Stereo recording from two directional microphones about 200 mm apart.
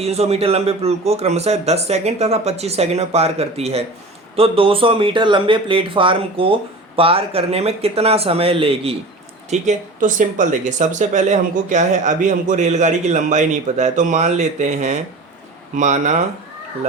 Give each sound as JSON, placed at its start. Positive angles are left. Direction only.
{"t": 0.0, "sound": "speech", "side_deg": -30}